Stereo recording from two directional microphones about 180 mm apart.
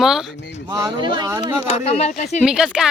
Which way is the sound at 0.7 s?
20° right (ahead or behind).